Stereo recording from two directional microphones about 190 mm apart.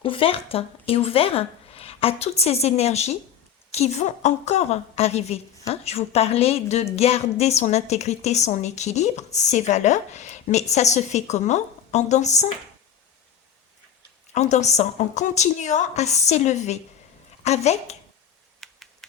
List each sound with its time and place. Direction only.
0.0 s a woman's voice: 30° left (ahead or behind)
14.3 s a woman's voice: 35° left (ahead or behind)
18.6 s typing: centre (ahead or behind)